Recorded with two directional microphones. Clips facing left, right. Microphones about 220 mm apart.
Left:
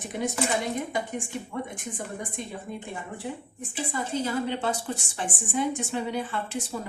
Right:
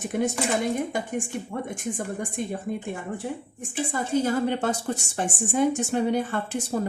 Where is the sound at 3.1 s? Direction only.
45° right (ahead or behind).